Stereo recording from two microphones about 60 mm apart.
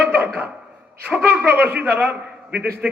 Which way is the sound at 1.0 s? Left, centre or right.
Right.